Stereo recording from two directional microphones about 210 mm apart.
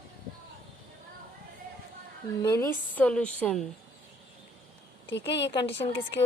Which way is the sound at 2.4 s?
15° left (ahead or behind).